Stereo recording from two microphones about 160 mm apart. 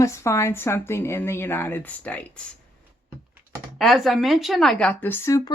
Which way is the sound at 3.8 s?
Centre (ahead or behind).